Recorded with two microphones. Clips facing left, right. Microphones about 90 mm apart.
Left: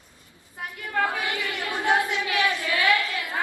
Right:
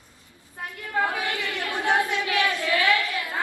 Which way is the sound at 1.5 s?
15° left (ahead or behind).